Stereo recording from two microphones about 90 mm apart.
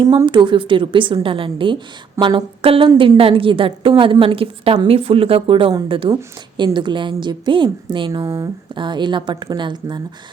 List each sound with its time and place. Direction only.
0.3 s a woman's voice: 65° right (ahead or behind); by 5.7 s 85° right
5.9 s a woman's voice: 75° right (ahead or behind)
6.7 s a woman's voice: 60° right (ahead or behind)